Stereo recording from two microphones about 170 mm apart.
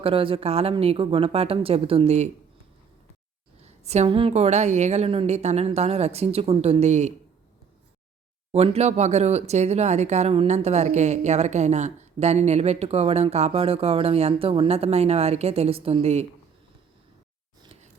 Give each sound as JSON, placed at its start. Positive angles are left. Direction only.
{"t": 0.0, "sound": "speech", "side_deg": -30}
{"t": 3.6, "sound": "speech", "side_deg": -40}
{"t": 8.5, "sound": "speech", "side_deg": -35}